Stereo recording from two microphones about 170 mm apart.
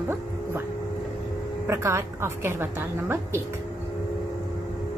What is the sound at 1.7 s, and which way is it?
A woman's voice, 15° right (ahead or behind).